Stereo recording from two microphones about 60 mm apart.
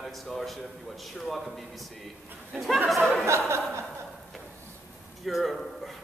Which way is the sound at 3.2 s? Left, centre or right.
Right.